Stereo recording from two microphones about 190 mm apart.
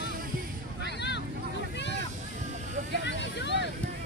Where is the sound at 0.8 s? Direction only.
60° left (ahead or behind).